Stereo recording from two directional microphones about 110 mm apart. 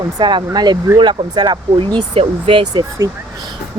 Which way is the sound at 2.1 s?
60° right (ahead or behind).